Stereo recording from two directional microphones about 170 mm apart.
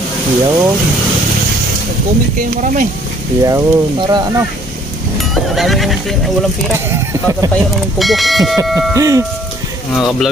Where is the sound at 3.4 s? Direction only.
20° right (ahead or behind).